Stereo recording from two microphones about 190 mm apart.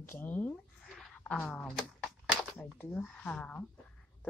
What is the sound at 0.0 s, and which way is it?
A woman's voice, 10° left (ahead or behind).